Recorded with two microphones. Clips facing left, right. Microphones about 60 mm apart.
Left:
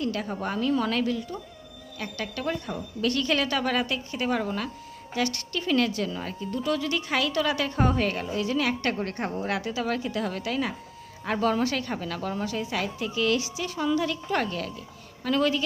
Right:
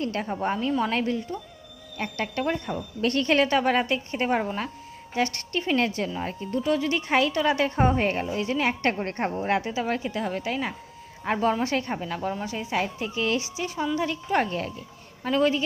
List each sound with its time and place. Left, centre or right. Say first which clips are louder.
0.0 s speech: right 2 dB; right